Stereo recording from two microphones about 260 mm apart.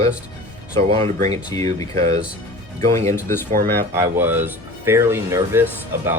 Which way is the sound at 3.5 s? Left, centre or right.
Right.